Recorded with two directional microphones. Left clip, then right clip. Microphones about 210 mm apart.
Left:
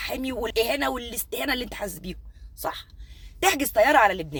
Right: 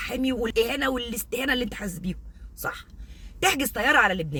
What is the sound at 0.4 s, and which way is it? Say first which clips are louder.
Speech: left 1 dB; 15° right (ahead or behind).